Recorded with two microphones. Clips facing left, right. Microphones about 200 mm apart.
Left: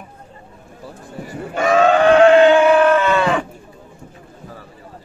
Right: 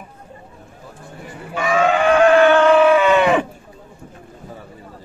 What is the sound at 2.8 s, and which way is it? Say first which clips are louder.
Livestock: right 2 dB; 10° right (ahead or behind).